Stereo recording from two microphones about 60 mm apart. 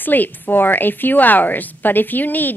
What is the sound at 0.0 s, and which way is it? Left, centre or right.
A woman's voice, left.